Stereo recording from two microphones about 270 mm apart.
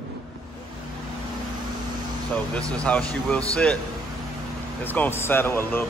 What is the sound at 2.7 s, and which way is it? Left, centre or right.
Speech, centre.